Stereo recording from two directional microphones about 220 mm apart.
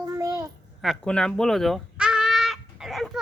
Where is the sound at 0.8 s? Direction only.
5° left (ahead or behind).